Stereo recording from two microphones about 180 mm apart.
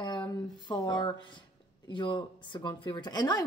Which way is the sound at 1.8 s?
25° left (ahead or behind).